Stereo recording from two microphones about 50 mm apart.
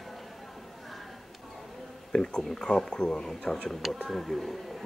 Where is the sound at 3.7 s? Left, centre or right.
Centre.